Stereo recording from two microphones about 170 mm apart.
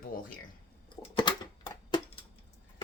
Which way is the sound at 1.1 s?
25° left (ahead or behind).